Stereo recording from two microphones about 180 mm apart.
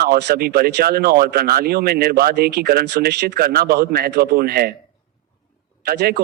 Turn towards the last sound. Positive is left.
turn(degrees=-60)  # may be behind; listen again after turning